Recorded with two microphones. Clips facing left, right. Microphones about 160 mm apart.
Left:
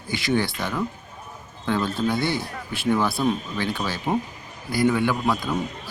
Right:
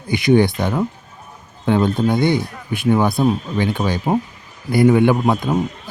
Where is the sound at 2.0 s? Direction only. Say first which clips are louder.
Right 7 dB; 20° right (ahead or behind).